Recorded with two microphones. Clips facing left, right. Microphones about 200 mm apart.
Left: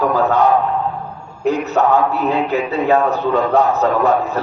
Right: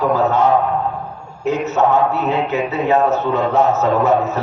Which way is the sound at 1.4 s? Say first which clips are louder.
Left 1 dB; 20° right (ahead or behind).